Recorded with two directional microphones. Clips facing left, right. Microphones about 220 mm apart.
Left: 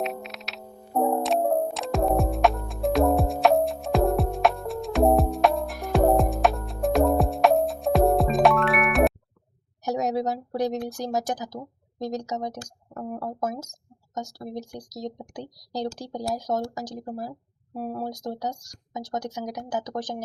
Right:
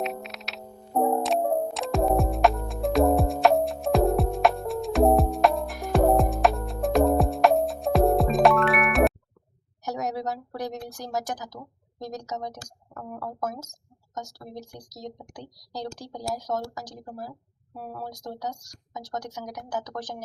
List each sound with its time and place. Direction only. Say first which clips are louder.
0.0 s music: left 1 dB; centre (ahead or behind)
9.8 s a sound: left 5 dB; 20° left (ahead or behind)
10.9 s speech: left 4 dB; 20° left (ahead or behind)